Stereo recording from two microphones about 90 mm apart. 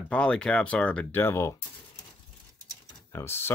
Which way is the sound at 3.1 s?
30° left (ahead or behind).